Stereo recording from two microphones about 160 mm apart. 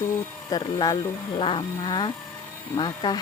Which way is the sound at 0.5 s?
25° left (ahead or behind).